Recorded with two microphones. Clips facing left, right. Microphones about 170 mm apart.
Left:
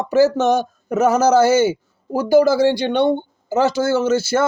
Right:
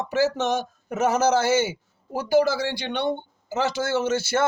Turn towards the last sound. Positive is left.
turn(degrees=35)  # may be behind; listen again after turning